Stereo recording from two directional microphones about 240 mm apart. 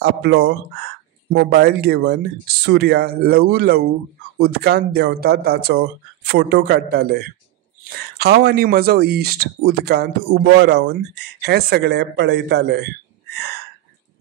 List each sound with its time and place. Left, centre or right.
0.0 s speech: right